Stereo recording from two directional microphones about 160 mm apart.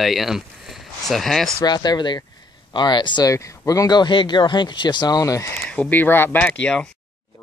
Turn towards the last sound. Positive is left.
turn(degrees=5)  # may be behind; listen again after turning